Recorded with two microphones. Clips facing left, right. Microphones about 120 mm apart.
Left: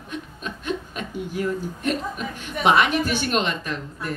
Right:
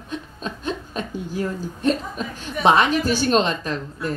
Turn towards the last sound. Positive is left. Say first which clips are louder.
# right 3 dB
turn(degrees=-35)  # may be behind; listen again after turning